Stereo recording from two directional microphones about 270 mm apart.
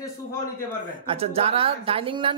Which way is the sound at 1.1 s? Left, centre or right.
Right.